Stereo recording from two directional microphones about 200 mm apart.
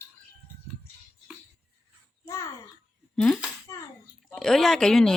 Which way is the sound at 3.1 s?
5° left (ahead or behind).